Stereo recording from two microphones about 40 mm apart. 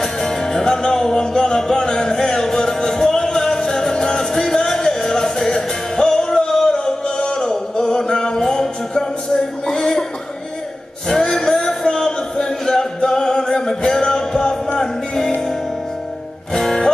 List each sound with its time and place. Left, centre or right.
0.0 s music: centre
11.1 s music: centre
16.5 s music: centre